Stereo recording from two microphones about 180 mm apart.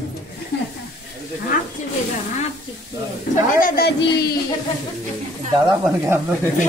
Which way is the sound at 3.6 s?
55° left (ahead or behind).